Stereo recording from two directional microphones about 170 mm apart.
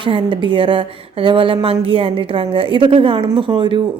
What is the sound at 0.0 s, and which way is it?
A woman's voice, 30° right (ahead or behind).